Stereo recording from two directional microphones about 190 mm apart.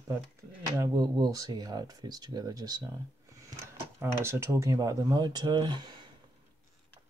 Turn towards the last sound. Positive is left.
turn(degrees=-25)  # may be behind; listen again after turning